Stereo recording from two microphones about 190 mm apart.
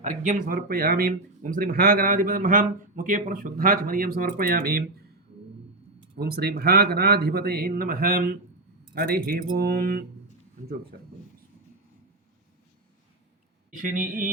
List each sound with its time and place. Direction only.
0.2 s speech: 45° right (ahead or behind)
6.1 s speech: 55° right (ahead or behind)